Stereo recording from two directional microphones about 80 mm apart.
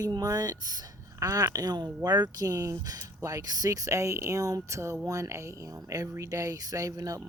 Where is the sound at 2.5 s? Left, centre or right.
Right.